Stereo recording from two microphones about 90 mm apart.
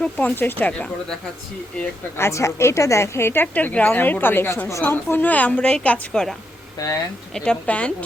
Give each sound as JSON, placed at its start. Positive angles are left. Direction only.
{"t": 0.0, "sound": "speech", "side_deg": 15}
{"t": 2.1, "sound": "a woman's voice", "side_deg": 30}
{"t": 3.4, "sound": "a woman's voice", "side_deg": 15}
{"t": 6.7, "sound": "speech", "side_deg": 40}
{"t": 7.3, "sound": "speech", "side_deg": 10}